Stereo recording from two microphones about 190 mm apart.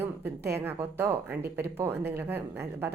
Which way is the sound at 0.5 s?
10° right (ahead or behind).